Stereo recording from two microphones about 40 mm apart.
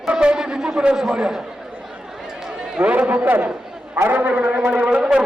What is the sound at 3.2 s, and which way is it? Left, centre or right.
A man's voice, right.